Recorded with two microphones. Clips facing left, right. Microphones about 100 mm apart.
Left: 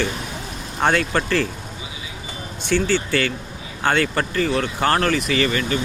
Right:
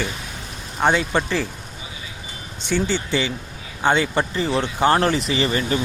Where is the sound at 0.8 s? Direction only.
15° right (ahead or behind).